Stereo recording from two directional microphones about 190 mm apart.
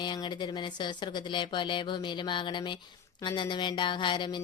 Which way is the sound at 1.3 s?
25° left (ahead or behind).